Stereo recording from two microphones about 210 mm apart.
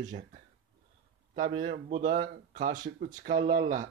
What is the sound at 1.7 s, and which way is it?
Speech, 40° right (ahead or behind).